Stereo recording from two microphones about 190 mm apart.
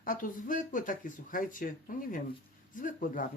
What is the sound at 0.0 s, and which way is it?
Speech, 45° left (ahead or behind).